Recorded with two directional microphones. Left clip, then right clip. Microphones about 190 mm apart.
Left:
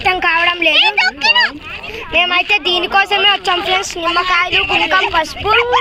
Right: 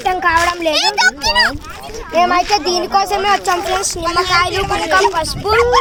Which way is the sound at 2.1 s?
5° left (ahead or behind).